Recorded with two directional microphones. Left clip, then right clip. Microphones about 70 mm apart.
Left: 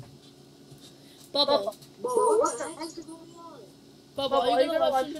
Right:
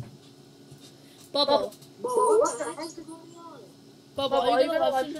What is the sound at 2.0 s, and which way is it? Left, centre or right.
Speech, right.